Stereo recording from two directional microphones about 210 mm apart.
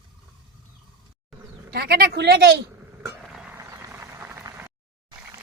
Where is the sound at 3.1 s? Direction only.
Centre (ahead or behind).